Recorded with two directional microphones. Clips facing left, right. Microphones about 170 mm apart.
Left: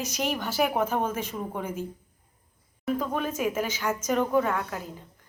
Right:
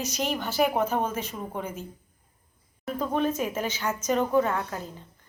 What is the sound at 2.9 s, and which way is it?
Speech, 5° left (ahead or behind).